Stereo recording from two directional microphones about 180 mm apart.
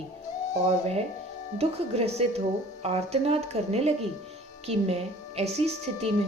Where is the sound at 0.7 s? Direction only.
35° right (ahead or behind).